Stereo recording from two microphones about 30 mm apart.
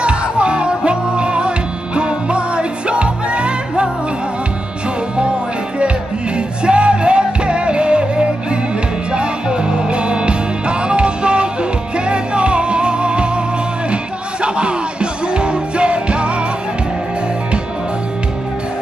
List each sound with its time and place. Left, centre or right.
0.0 s music: right
6.3 s music: right
14.4 s music: right